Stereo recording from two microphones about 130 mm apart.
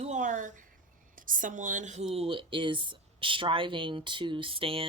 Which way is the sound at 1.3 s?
90° right.